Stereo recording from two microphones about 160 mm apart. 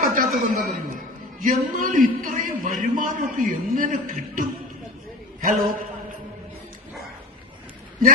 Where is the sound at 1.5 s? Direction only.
60° right (ahead or behind).